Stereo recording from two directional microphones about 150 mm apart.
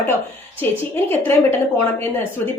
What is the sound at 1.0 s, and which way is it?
Speech, 15° left (ahead or behind).